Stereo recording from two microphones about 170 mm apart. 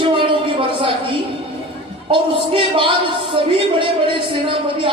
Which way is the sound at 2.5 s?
30° right (ahead or behind).